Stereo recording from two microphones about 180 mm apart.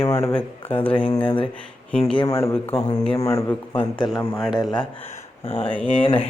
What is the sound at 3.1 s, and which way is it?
Speech, 20° left (ahead or behind).